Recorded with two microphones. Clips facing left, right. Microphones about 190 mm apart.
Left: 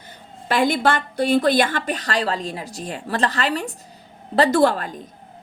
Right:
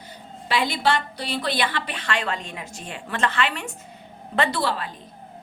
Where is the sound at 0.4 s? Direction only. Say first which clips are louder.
Left 4 dB; 50° left (ahead or behind).